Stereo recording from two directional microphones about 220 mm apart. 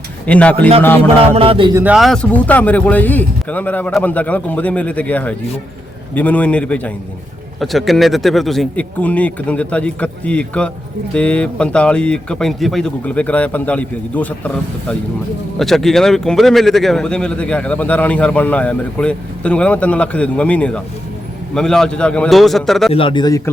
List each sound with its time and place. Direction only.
0.3 s speech: 5° left (ahead or behind)
1.2 s a man's voice: 25° right (ahead or behind)
1.8 s speech: 5° right (ahead or behind)
22.9 s speech: 25° left (ahead or behind)